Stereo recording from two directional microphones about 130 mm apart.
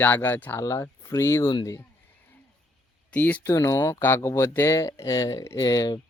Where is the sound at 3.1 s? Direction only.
15° left (ahead or behind).